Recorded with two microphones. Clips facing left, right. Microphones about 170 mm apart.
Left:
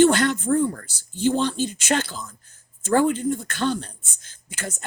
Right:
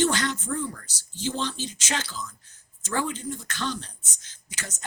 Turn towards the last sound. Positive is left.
turn(degrees=55)  # may be behind; listen again after turning